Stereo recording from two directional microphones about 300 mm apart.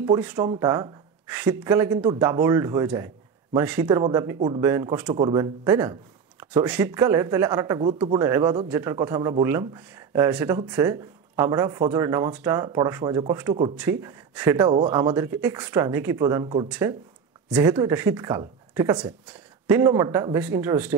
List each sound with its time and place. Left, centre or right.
0.0 s speech: centre